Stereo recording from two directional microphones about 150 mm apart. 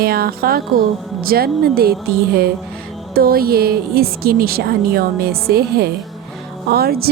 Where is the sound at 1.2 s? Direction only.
85° right.